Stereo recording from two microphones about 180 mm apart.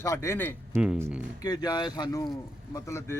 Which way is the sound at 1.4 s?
20° left (ahead or behind).